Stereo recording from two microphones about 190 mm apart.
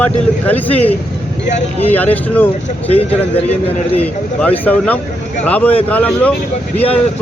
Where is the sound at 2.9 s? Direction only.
30° left (ahead or behind).